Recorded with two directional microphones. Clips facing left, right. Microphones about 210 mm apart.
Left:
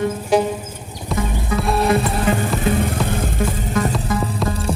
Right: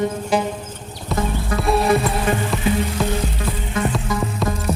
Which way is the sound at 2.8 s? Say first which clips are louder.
Even; 50° left (ahead or behind).